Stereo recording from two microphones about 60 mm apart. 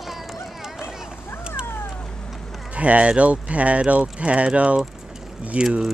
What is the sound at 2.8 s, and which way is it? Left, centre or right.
Speech, right.